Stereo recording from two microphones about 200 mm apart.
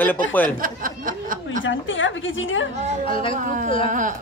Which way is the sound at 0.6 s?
45° right (ahead or behind).